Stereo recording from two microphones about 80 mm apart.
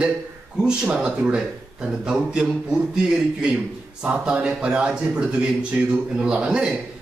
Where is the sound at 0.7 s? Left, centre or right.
Centre.